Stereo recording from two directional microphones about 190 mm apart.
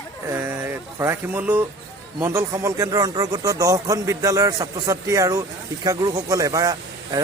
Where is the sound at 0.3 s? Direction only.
15° right (ahead or behind).